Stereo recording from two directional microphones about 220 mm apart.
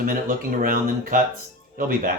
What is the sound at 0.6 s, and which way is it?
Speech, 40° right (ahead or behind).